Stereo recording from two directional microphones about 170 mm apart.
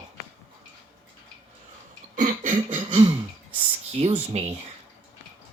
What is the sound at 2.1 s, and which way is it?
Cough, 50° right (ahead or behind).